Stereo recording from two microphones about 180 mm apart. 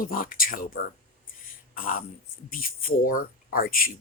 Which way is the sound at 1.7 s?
50° left (ahead or behind).